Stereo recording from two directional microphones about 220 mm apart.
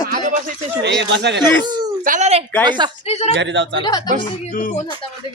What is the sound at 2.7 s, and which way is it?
Speech, 20° right (ahead or behind).